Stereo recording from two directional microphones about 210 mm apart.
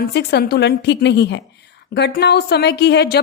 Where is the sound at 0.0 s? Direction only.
50° left (ahead or behind).